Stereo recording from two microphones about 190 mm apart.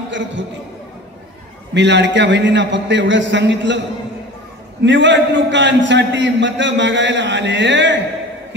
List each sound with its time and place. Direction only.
0.1 s a man's voice: 70° right (ahead or behind)
1.7 s a man's voice: 65° right (ahead or behind)
4.8 s a man's voice: 70° right (ahead or behind)